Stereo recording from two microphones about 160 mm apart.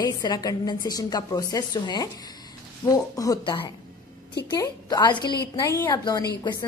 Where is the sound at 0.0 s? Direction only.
25° left (ahead or behind).